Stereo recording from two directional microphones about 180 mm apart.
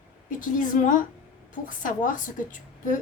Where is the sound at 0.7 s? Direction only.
50° left (ahead or behind).